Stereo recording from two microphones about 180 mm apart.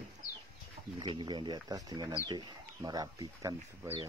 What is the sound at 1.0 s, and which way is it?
Speech, 25° right (ahead or behind).